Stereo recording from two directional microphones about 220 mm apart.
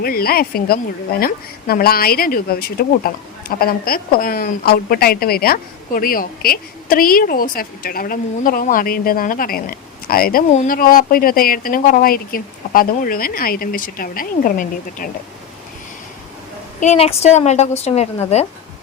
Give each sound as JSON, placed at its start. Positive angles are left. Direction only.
{"t": 0.0, "sound": "a woman's voice", "side_deg": 45}
{"t": 16.8, "sound": "a woman's voice", "side_deg": 30}